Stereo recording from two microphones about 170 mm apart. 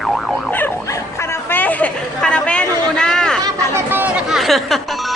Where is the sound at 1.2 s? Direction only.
10° left (ahead or behind).